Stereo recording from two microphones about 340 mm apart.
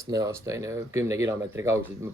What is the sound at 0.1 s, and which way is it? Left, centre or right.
Speech, centre.